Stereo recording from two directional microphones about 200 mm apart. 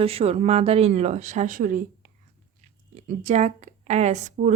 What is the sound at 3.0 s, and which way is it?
Speech, 35° right (ahead or behind).